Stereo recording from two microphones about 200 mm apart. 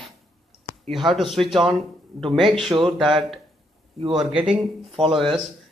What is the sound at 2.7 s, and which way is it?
Speech, 25° right (ahead or behind).